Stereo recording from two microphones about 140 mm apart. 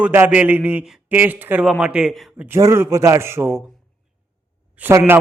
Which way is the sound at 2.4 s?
20° right (ahead or behind).